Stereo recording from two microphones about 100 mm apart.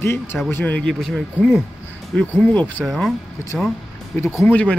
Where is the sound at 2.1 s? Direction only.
15° left (ahead or behind).